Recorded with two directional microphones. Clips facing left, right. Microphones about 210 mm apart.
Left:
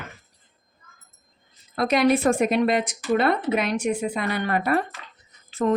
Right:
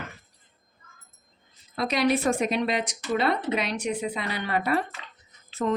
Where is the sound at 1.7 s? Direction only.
50° left (ahead or behind).